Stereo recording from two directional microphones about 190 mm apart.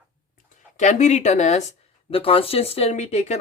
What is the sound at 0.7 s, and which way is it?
Speech, 40° left (ahead or behind).